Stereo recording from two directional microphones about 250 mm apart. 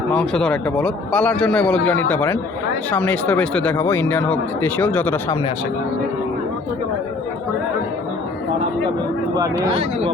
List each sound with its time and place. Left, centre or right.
0.1 s a man's voice: centre
9.3 s speech: centre